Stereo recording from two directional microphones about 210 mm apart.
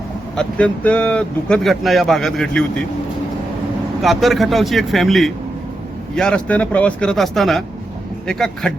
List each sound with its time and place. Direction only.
0.3 s speech: 5° left (ahead or behind)
4.0 s speech: centre (ahead or behind)